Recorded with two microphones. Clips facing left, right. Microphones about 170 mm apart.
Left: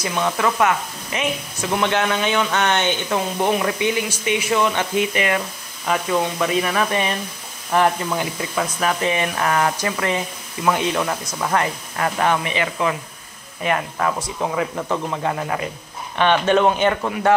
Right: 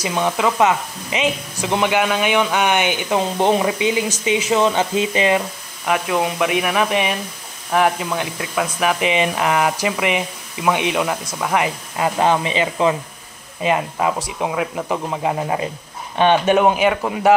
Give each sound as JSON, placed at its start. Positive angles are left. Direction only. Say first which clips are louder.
{"t": 0.0, "sound": "speech", "louder": "right 2 dB", "side_deg": -15}
{"t": 3.2, "sound": "speech", "louder": "right 5 dB", "side_deg": -25}
{"t": 5.9, "sound": "speech", "louder": "right 1 dB", "side_deg": -5}
{"t": 14.4, "sound": "speech", "louder": "right 1 dB", "side_deg": -5}